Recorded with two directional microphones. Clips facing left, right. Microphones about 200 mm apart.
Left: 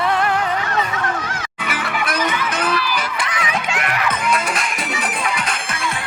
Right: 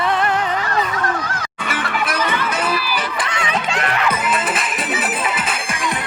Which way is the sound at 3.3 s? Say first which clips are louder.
Right 1 dB; 30° right (ahead or behind).